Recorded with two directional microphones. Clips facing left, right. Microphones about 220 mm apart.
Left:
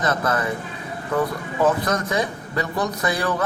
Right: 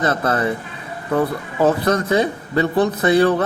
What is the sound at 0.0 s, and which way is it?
Speech, 30° right (ahead or behind).